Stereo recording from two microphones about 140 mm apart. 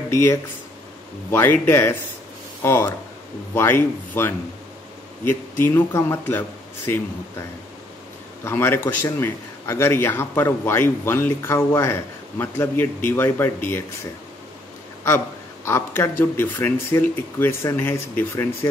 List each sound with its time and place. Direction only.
1.3 s a man's voice: 15° left (ahead or behind)
8.5 s a man's voice: 20° left (ahead or behind)
15.6 s a man's voice: 20° left (ahead or behind)